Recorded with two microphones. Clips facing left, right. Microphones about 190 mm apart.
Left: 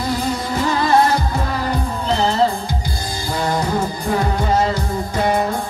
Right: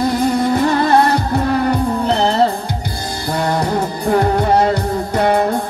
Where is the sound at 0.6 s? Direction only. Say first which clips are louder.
Right 4 dB; 55° right (ahead or behind).